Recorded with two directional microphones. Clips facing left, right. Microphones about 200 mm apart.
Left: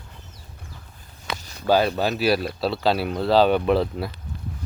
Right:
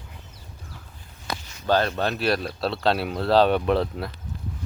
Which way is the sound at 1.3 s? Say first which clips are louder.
Left 2 dB; 40° left (ahead or behind).